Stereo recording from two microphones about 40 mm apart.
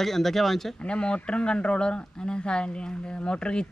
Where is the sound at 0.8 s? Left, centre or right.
Left.